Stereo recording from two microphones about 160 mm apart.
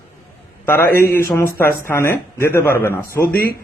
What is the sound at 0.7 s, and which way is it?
A man's voice, 15° left (ahead or behind).